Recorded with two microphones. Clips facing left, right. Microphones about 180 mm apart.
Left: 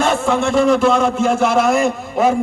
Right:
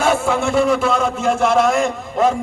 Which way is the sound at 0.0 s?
5° right (ahead or behind).